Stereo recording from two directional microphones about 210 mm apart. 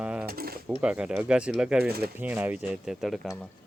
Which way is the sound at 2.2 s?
10° right (ahead or behind).